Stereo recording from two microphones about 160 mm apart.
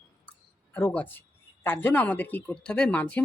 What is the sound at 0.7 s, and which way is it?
Speech, 10° left (ahead or behind).